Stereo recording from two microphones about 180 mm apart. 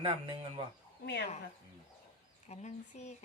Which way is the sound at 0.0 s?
30° right (ahead or behind).